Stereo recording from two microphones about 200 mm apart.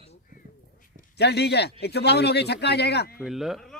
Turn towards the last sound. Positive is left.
turn(degrees=0)  # may be behind; listen again after turning